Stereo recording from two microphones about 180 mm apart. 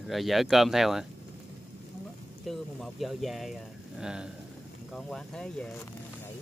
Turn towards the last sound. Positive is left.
turn(degrees=5)  # may be behind; listen again after turning